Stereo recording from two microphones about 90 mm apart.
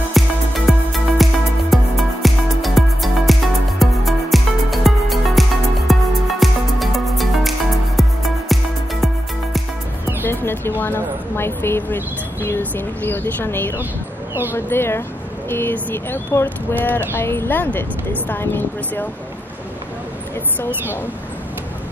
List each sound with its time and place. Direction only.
0.2 s music: centre (ahead or behind)
10.2 s speech: 25° left (ahead or behind)